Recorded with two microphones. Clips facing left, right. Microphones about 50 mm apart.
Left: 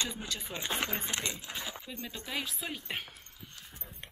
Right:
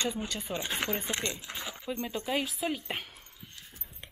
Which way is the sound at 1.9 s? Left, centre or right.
Centre.